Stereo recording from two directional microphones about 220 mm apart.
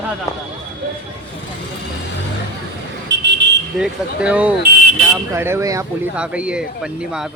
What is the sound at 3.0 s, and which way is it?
Vehicle, 50° right (ahead or behind).